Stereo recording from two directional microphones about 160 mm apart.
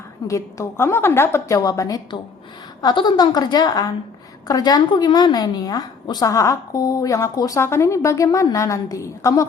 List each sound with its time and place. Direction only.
0.3 s a woman's voice: 20° left (ahead or behind)